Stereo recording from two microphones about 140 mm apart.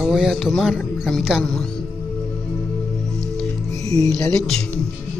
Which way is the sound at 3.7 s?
25° left (ahead or behind).